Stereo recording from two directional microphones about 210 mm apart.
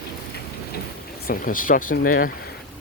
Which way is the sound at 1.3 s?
40° left (ahead or behind).